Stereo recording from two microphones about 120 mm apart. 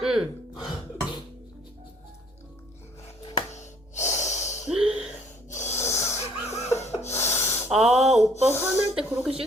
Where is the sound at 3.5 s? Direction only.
80° left.